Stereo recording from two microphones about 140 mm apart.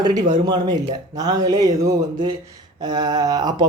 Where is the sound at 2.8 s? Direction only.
30° right (ahead or behind).